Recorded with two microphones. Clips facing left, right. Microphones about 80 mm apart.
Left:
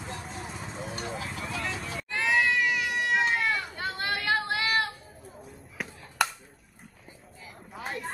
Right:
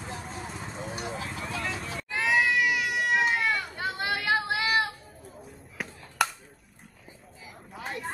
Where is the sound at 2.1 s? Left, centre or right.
Centre.